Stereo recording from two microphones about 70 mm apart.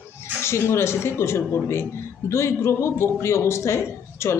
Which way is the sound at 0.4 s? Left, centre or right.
Left.